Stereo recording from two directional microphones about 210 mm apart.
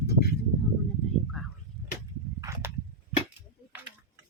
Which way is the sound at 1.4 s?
Centre (ahead or behind).